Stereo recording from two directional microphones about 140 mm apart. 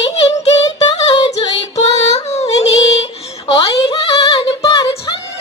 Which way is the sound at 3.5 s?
35° left (ahead or behind).